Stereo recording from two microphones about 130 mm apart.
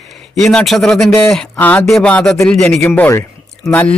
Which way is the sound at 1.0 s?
15° left (ahead or behind).